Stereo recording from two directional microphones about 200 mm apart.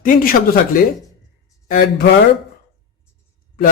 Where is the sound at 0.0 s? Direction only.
45° left (ahead or behind).